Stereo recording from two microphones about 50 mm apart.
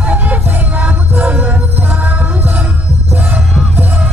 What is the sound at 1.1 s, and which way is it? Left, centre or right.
Music, right.